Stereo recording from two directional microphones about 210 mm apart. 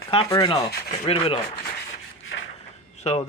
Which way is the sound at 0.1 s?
25° left (ahead or behind).